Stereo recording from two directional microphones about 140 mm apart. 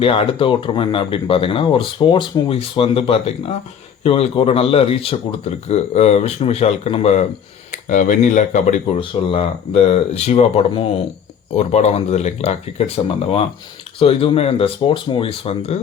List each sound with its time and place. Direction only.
0.0 s speech: 40° left (ahead or behind)
7.9 s speech: 70° left (ahead or behind)
9.0 s speech: 45° left (ahead or behind)
14.0 s speech: 40° left (ahead or behind)